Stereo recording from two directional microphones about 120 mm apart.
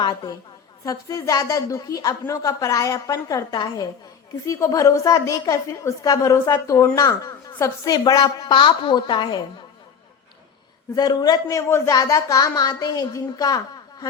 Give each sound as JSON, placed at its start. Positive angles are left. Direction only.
{"t": 0.0, "sound": "speech", "side_deg": 35}
{"t": 0.9, "sound": "a woman's voice", "side_deg": 25}
{"t": 10.9, "sound": "speech", "side_deg": 35}